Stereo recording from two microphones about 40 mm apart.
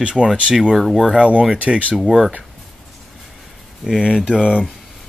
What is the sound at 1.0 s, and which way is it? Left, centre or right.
Speech, centre.